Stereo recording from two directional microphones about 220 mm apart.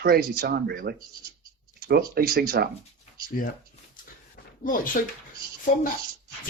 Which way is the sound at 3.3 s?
40° left (ahead or behind).